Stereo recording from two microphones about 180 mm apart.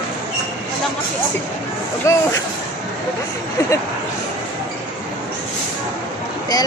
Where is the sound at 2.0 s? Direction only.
15° left (ahead or behind).